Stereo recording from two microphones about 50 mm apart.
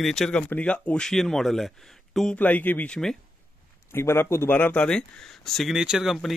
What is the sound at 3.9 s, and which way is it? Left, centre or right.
Speech, left.